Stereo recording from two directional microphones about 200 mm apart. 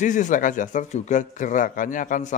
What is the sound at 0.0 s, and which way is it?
Speech, 40° left (ahead or behind).